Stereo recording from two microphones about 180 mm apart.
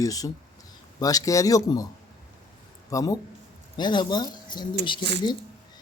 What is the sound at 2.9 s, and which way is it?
Speech, 20° left (ahead or behind).